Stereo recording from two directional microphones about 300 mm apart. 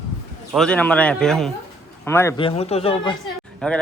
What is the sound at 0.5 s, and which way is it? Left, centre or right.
A woman's voice, centre.